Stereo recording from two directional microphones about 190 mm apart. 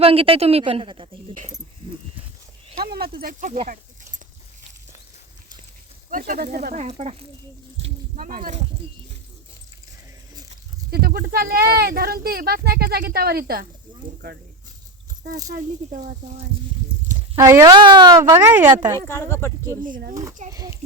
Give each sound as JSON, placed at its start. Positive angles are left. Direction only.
{"t": 0.0, "sound": "a woman's voice", "side_deg": -30}
{"t": 2.7, "sound": "speech", "side_deg": -55}
{"t": 6.1, "sound": "speech", "side_deg": -45}
{"t": 6.8, "sound": "speech", "side_deg": -35}
{"t": 8.1, "sound": "speech", "side_deg": -45}
{"t": 10.9, "sound": "speech", "side_deg": -55}
{"t": 15.5, "sound": "speech", "side_deg": -45}
{"t": 17.3, "sound": "speech", "side_deg": -15}
{"t": 18.7, "sound": "a woman's voice", "side_deg": -20}
{"t": 18.9, "sound": "speech", "side_deg": 15}
{"t": 19.8, "sound": "speech", "side_deg": -45}
{"t": 20.5, "sound": "speech", "side_deg": -15}